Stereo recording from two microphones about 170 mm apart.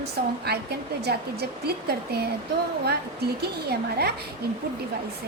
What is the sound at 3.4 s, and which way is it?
Speech, 70° right (ahead or behind).